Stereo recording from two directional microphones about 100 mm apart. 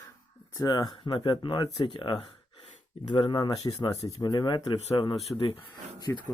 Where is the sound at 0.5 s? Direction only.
35° left (ahead or behind).